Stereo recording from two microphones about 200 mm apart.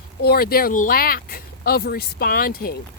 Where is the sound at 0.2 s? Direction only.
50° left (ahead or behind).